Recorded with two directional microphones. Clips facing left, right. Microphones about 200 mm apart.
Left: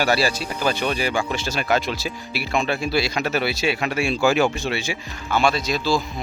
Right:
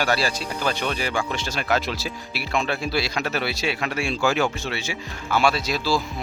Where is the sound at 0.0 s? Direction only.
5° left (ahead or behind).